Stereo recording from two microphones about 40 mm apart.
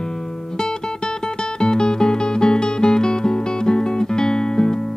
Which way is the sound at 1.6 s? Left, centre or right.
Centre.